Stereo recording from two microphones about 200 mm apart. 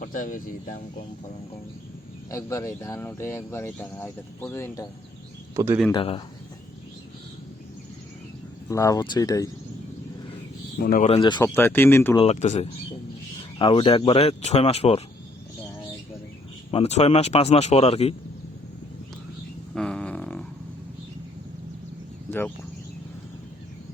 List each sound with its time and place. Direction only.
0.0 s speech: 45° left (ahead or behind)
2.3 s speech: 15° left (ahead or behind)
5.5 s speech: 15° right (ahead or behind)
5.9 s speech: 25° left (ahead or behind)
8.7 s speech: 15° left (ahead or behind)
10.8 s speech: 45° left (ahead or behind)
11.2 s speech: 20° left (ahead or behind)
11.5 s speech: 10° left (ahead or behind)
12.1 s speech: 30° left (ahead or behind)
16.7 s speech: 30° left (ahead or behind)
19.7 s a sound: 5° left (ahead or behind)
22.3 s speech: 10° left (ahead or behind)